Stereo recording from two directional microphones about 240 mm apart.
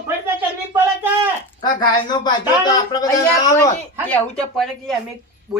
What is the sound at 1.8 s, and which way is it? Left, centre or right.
A man's voice, centre.